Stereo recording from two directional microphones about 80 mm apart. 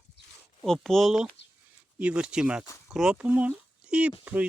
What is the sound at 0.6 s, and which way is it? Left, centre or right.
Speech, centre.